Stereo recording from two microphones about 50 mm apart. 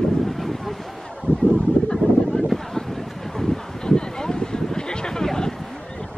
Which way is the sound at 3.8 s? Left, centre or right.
Centre.